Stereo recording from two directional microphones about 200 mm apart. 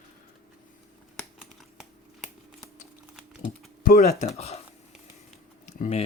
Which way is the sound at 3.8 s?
45° left (ahead or behind).